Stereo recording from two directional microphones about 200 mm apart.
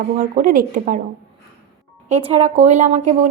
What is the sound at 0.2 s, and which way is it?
Speech, 45° right (ahead or behind).